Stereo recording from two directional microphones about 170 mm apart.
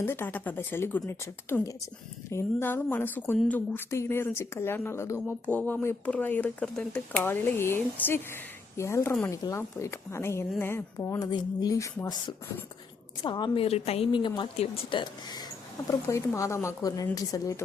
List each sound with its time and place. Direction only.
0.0 s speech: 15° left (ahead or behind)
13.2 s speech: 25° left (ahead or behind)